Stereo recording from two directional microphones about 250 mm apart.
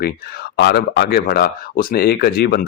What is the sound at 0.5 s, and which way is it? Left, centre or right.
Speech, left.